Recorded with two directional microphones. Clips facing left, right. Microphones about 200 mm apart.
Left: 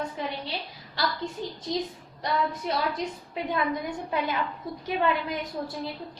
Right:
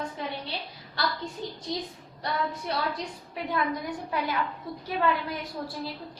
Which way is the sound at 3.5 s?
20° left (ahead or behind).